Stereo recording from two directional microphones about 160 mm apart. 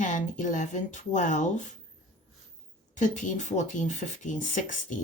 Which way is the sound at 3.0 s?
50° left (ahead or behind).